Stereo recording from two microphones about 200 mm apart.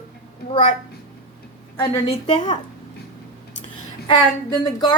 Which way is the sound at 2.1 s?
35° left (ahead or behind).